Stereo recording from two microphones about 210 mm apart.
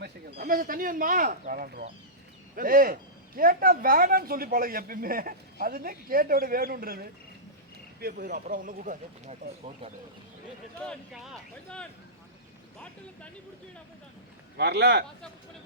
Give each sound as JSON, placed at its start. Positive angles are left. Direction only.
{"t": 0.3, "sound": "speech", "side_deg": -45}
{"t": 10.8, "sound": "speech", "side_deg": 0}
{"t": 14.5, "sound": "speech", "side_deg": -50}